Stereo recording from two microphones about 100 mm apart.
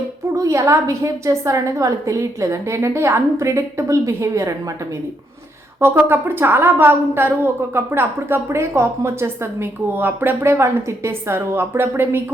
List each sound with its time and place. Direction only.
0.3 s a woman's voice: 30° right (ahead or behind)
5.8 s a woman's voice: 25° right (ahead or behind)